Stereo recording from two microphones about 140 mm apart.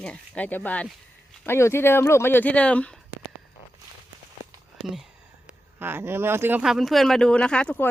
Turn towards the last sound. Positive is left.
turn(degrees=5)  # may be behind; listen again after turning